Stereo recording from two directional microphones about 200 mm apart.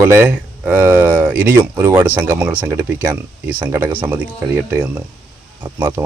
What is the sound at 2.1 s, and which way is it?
Speech, 5° right (ahead or behind).